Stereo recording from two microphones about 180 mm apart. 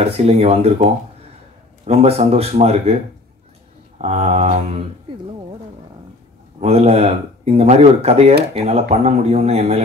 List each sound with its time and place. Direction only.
0.0 s speech: 35° right (ahead or behind)
1.9 s speech: 35° right (ahead or behind)
4.0 s speech: 35° right (ahead or behind)
6.6 s speech: 35° right (ahead or behind)